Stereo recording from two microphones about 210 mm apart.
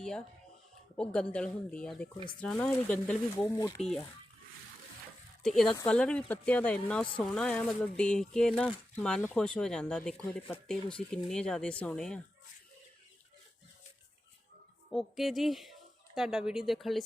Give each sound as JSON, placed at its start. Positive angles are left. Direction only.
{"t": 0.9, "sound": "speech", "side_deg": 5}
{"t": 3.4, "sound": "speech", "side_deg": 15}
{"t": 3.8, "sound": "speech", "side_deg": 0}
{"t": 5.4, "sound": "speech", "side_deg": 0}
{"t": 14.9, "sound": "speech", "side_deg": 0}